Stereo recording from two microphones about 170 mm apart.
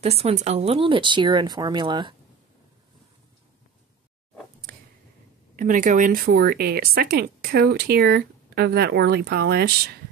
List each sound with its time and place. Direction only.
0.0 s speech: 35° right (ahead or behind)
5.6 s speech: 50° right (ahead or behind); by 9.8 s 70° right (ahead or behind)